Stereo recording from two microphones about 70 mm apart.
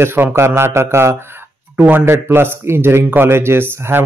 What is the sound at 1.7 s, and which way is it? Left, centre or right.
A man's voice, right.